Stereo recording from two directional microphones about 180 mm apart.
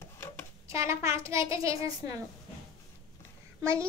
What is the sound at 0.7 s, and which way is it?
A child's voice, 15° right (ahead or behind).